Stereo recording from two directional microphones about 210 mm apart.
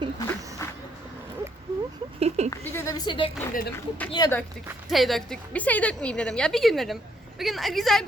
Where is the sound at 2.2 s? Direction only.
30° right (ahead or behind).